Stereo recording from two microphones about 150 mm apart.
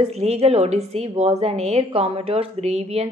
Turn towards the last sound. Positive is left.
turn(degrees=-45)  # may be behind; listen again after turning